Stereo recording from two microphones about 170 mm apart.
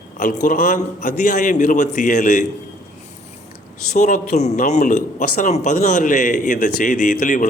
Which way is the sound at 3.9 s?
45° left (ahead or behind).